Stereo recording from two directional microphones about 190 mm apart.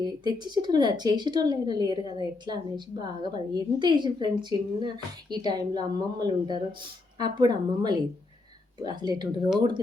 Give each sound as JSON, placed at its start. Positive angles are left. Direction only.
{"t": 0.0, "sound": "speech", "side_deg": -20}